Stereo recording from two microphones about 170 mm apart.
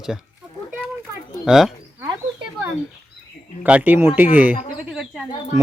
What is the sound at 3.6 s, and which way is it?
Speech, 10° right (ahead or behind).